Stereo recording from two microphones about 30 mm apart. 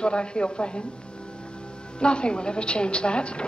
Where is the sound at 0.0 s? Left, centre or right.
Left.